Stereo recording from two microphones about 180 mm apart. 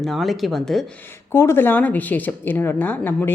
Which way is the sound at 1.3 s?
15° left (ahead or behind).